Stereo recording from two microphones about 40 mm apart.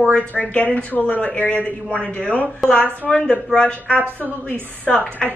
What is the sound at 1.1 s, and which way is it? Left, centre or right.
Speech, left.